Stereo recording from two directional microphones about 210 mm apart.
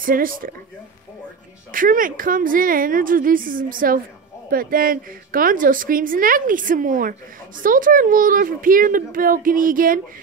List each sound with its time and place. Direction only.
0.0 s a woman's voice: 40° right (ahead or behind)
1.7 s a woman's voice: 40° right (ahead or behind)